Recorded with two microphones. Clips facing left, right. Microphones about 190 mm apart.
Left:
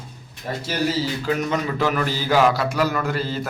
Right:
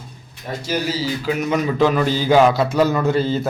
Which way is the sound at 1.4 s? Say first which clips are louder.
Right 5 dB; 15° right (ahead or behind).